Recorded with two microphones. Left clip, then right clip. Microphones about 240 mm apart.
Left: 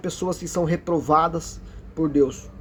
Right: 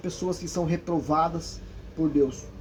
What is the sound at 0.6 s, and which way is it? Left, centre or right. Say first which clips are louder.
Speech: left 6 dB; left.